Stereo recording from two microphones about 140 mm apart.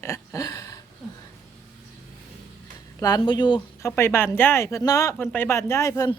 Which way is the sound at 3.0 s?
30° left (ahead or behind).